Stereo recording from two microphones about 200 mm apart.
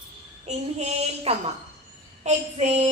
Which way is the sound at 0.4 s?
35° right (ahead or behind).